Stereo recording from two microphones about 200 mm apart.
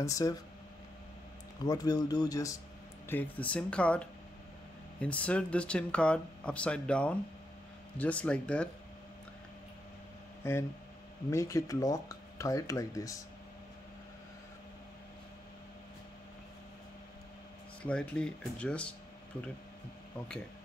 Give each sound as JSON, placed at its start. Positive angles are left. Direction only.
{"t": 0.0, "sound": "speech", "side_deg": 15}
{"t": 1.6, "sound": "speech", "side_deg": 20}
{"t": 3.1, "sound": "speech", "side_deg": 10}
{"t": 10.4, "sound": "speech", "side_deg": 10}
{"t": 17.8, "sound": "speech", "side_deg": 5}